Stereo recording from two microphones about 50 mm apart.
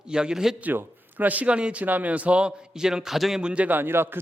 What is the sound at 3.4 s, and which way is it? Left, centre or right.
Speech, right.